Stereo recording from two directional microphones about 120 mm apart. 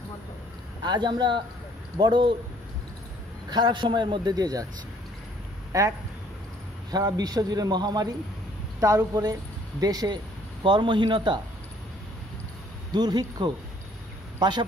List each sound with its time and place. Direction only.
0.8 s a man's voice: 35° right (ahead or behind)
3.4 s a man's voice: 40° right (ahead or behind)
5.7 s a man's voice: 25° right (ahead or behind); by 11.3 s 40° right (ahead or behind)
12.9 s a man's voice: 35° right (ahead or behind)